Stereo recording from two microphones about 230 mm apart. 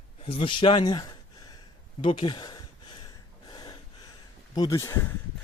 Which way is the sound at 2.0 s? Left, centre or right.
Left.